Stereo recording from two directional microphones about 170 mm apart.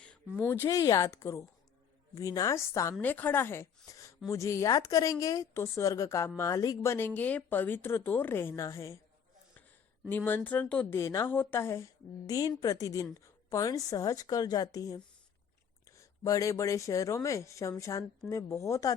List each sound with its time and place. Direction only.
0.3 s speech: 15° left (ahead or behind)
10.1 s speech: 10° left (ahead or behind)